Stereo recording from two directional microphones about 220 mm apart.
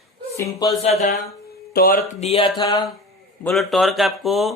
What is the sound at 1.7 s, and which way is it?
Speech, 40° left (ahead or behind).